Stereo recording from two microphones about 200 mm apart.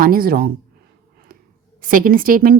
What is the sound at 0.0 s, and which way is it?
Speech, 45° right (ahead or behind).